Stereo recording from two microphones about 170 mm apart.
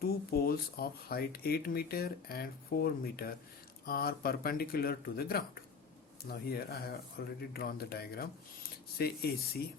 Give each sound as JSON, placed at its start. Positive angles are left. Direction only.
{"t": 0.0, "sound": "speech", "side_deg": 65}